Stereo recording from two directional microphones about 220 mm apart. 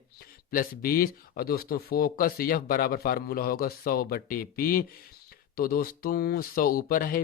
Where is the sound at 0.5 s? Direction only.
40° left (ahead or behind).